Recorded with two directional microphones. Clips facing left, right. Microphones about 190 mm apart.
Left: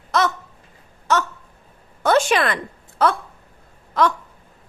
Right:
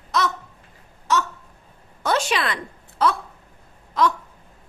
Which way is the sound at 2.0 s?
50° left (ahead or behind).